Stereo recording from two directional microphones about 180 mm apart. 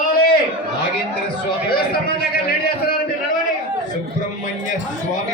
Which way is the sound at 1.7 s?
60° left (ahead or behind).